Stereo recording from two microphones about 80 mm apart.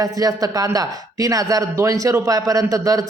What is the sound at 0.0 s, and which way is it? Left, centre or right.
A man's voice, right.